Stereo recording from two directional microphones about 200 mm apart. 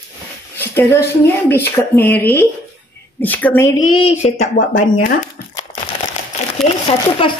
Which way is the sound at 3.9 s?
30° left (ahead or behind).